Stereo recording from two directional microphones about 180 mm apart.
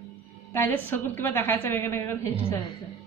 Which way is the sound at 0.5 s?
10° left (ahead or behind).